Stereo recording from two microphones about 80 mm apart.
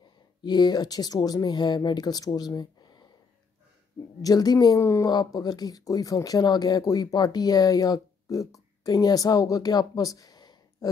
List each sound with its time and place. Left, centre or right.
0.4 s speech: left
4.2 s speech: left
4.8 s speech: left
5.1 s speech: left